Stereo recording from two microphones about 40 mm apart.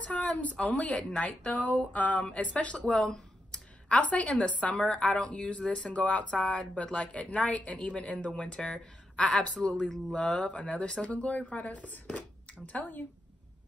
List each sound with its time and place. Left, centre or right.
0.0 s speech: left
3.0 s a sound: centre
3.9 s speech: left